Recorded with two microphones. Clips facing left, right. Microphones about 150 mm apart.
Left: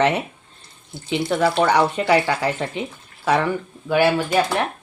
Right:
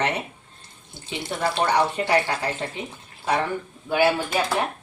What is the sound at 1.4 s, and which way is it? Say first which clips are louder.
Speech: left 3 dB; 90° left.